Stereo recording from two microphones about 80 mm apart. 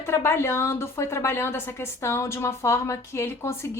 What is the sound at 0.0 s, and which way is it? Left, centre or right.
A woman's voice, left.